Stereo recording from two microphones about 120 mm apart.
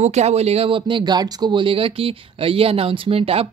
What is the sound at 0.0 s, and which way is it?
Speech, 65° right (ahead or behind).